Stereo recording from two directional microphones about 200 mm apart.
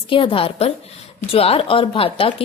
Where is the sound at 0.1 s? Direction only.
25° left (ahead or behind).